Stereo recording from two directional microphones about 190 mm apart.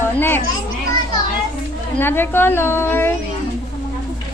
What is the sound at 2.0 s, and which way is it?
A woman's voice, 10° left (ahead or behind).